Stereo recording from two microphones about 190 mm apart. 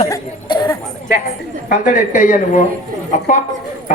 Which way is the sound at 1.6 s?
40° left (ahead or behind).